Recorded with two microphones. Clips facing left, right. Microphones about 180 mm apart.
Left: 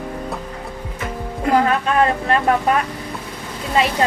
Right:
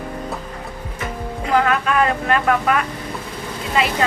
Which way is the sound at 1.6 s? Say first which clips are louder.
Left 1 dB; 35° left (ahead or behind).